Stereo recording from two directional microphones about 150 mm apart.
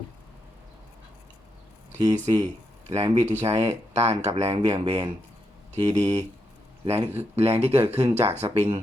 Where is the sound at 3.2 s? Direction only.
50° right (ahead or behind).